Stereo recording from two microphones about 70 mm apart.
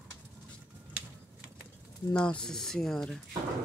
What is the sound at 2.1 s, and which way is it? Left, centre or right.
Speech, centre.